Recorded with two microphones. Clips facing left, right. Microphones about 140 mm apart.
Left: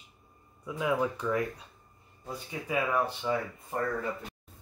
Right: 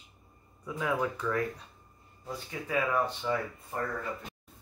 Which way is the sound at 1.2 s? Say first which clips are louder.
Left 2 dB; 20° left (ahead or behind).